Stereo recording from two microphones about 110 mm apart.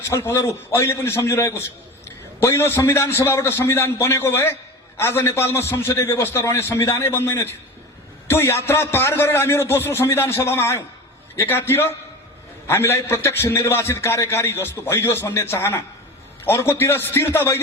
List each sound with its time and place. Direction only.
0.1 s a man's voice: 25° left (ahead or behind)